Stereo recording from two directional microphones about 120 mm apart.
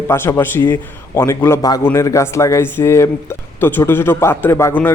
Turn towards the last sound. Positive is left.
turn(degrees=20)  # may be behind; listen again after turning